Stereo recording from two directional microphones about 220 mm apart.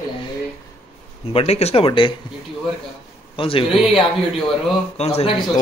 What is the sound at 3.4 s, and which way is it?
Speech, 25° left (ahead or behind).